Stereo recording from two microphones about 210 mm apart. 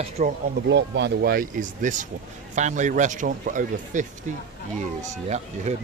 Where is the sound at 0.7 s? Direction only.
55° right (ahead or behind); by 4.0 s 40° right (ahead or behind).